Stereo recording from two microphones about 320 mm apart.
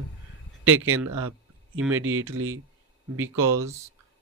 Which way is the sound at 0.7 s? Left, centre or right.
Right.